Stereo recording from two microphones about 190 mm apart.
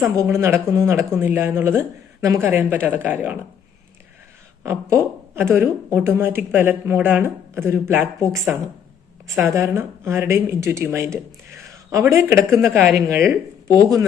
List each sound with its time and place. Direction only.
0.2 s speech: 15° right (ahead or behind)
4.6 s speech: 15° right (ahead or behind)
12.6 s speech: centre (ahead or behind)
13.2 s speech: 15° right (ahead or behind)